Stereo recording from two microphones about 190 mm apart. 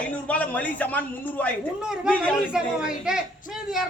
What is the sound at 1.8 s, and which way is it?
Speech, 5° right (ahead or behind).